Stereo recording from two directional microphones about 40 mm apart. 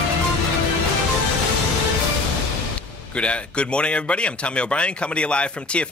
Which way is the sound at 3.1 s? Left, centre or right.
Left.